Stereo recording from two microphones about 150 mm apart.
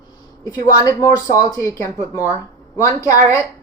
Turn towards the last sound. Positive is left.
turn(degrees=20)  # may be behind; listen again after turning